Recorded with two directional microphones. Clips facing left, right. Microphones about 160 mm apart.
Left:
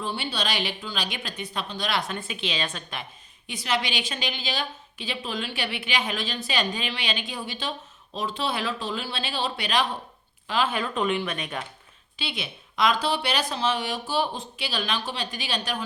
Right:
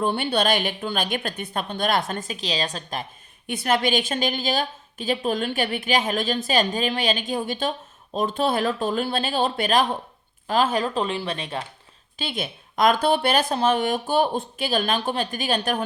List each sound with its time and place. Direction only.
0.0 s a woman's voice: 55° right (ahead or behind); by 11.6 s 30° right (ahead or behind)
12.1 s a woman's voice: 45° right (ahead or behind)